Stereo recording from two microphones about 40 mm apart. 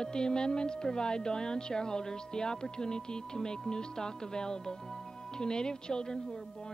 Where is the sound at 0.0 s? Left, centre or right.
Centre.